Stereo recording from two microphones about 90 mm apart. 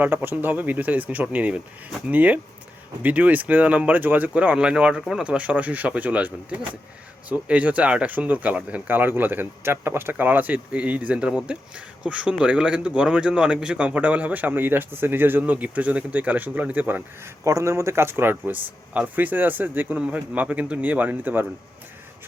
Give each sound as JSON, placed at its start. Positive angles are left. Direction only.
{"t": 0.0, "sound": "speech", "side_deg": -20}
{"t": 17.4, "sound": "speech", "side_deg": -35}